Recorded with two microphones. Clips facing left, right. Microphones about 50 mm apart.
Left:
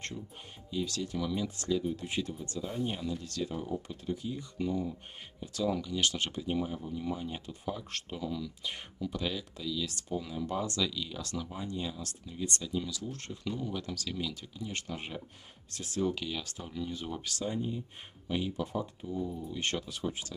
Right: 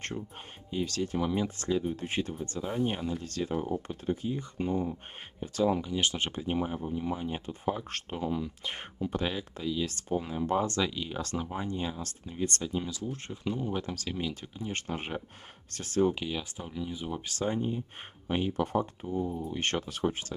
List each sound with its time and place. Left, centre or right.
0.7 s speech: right
3.8 s speech: right
13.0 s speech: right
16.0 s speech: right
17.3 s speech: right
19.0 s speech: right